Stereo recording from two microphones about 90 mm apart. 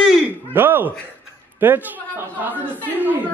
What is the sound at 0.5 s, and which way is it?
A man's voice, 25° right (ahead or behind).